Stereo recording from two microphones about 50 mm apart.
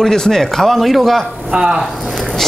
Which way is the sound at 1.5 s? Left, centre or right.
Centre.